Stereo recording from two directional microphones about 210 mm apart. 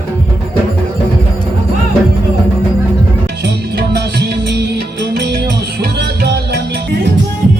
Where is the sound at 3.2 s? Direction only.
50° right (ahead or behind).